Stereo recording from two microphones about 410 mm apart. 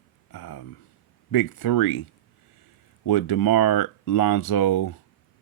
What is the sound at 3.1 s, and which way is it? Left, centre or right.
Speech, left.